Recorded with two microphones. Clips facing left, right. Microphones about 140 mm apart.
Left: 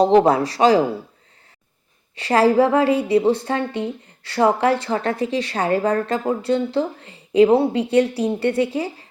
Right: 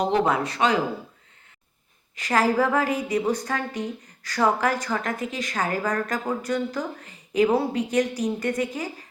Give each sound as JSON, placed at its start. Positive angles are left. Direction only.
{"t": 0.0, "sound": "speech", "side_deg": 35}
{"t": 2.1, "sound": "a woman's voice", "side_deg": 30}